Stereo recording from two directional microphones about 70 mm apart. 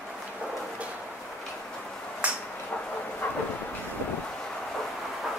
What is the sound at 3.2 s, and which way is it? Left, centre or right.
Train, left.